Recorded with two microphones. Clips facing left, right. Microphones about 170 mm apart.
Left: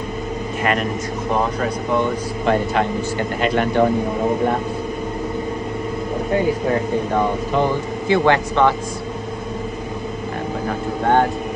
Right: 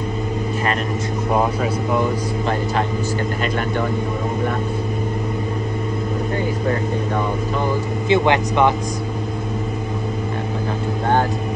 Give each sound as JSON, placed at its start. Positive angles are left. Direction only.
{"t": 8.1, "sound": "speech", "side_deg": -20}